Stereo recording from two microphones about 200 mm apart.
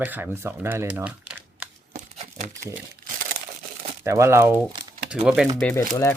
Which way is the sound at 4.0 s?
15° right (ahead or behind).